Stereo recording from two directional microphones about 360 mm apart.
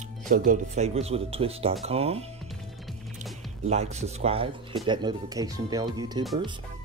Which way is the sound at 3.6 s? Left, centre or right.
Centre.